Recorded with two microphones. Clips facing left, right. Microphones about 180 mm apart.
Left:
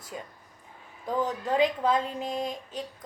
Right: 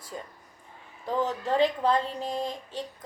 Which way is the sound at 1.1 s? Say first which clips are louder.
Right 1 dB; centre (ahead or behind).